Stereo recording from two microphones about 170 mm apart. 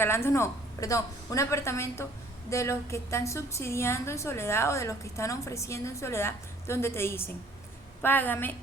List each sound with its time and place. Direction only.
0.0 s a woman's voice: 15° left (ahead or behind)